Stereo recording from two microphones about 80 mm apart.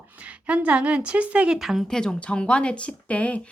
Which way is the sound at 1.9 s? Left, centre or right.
Centre.